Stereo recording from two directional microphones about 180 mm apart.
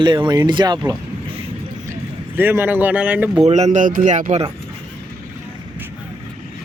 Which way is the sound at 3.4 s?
35° right (ahead or behind).